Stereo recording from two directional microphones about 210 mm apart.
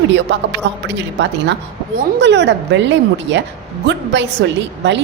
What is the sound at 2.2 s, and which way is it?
A woman's voice, 55° right (ahead or behind).